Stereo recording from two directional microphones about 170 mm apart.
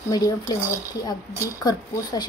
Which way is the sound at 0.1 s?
20° left (ahead or behind).